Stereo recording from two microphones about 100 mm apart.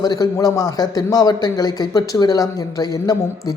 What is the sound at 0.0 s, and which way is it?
A woman's voice, 40° left (ahead or behind).